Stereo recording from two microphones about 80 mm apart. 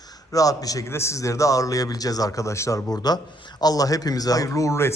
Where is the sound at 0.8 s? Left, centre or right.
Left.